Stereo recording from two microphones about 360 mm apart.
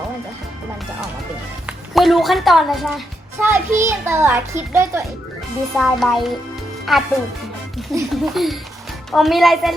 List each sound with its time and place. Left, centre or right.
1.9 s a woman's voice: centre